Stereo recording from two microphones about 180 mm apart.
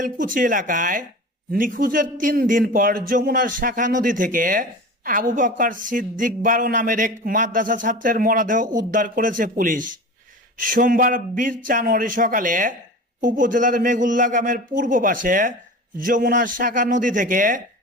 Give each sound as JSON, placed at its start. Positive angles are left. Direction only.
{"t": 0.2, "sound": "a woman's voice", "side_deg": -50}